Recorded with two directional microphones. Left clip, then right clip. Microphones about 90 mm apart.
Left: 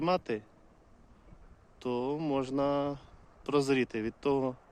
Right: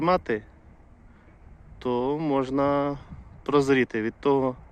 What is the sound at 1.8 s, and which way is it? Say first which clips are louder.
A man's voice: right 7 dB; 25° left (ahead or behind).